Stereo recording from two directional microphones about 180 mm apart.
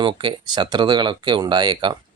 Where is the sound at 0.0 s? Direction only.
30° right (ahead or behind).